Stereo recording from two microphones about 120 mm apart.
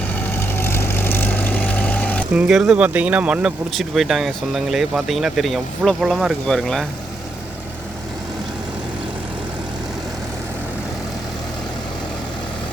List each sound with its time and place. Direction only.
0.1 s vehicle: 15° left (ahead or behind)
2.3 s speech: 5° right (ahead or behind)